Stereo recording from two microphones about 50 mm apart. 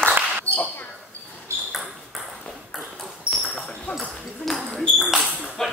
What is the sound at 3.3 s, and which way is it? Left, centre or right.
Basketball bounce, right.